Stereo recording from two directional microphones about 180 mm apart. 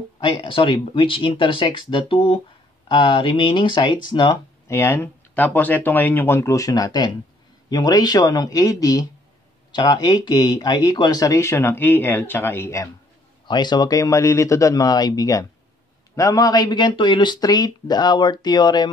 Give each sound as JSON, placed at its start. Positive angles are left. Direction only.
{"t": 0.2, "sound": "speech", "side_deg": 25}